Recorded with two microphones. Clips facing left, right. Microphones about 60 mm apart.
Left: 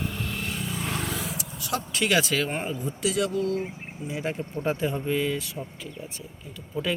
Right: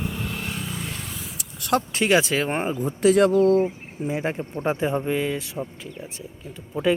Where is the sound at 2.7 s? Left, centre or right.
Right.